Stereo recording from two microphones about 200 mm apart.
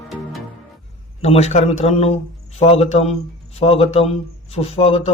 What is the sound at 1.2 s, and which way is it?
A man's voice, 30° left (ahead or behind).